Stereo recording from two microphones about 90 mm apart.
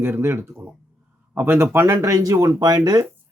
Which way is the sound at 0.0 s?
25° right (ahead or behind).